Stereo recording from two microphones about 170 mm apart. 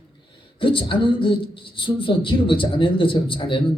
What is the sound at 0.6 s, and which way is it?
Speech, 30° left (ahead or behind).